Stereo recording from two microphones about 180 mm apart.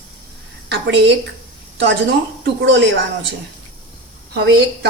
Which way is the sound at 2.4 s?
85° right.